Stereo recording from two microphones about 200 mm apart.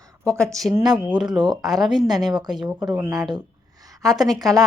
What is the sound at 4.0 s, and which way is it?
Speech, centre (ahead or behind).